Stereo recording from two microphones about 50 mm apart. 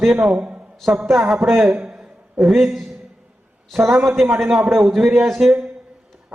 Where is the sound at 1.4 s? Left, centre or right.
Centre.